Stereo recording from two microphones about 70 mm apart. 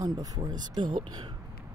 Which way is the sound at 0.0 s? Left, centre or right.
Right.